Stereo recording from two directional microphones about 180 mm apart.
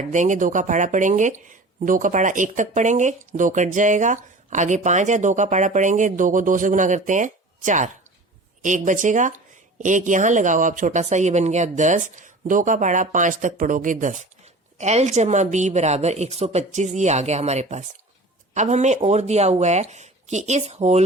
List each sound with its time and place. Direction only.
0.1 s speech: 45° right (ahead or behind)